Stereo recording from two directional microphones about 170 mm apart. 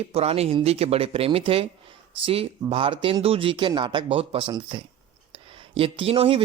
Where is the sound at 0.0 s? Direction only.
35° right (ahead or behind).